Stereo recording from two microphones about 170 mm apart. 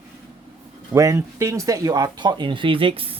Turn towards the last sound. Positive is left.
turn(degrees=-35)  # may be behind; listen again after turning